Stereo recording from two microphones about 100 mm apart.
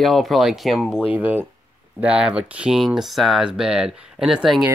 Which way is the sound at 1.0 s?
15° right (ahead or behind).